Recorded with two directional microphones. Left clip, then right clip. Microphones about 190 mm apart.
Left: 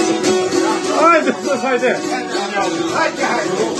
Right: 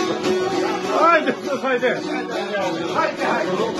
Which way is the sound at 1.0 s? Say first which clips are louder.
Left 4 dB; centre (ahead or behind).